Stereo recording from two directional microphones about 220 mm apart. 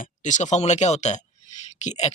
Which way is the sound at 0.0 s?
35° left (ahead or behind).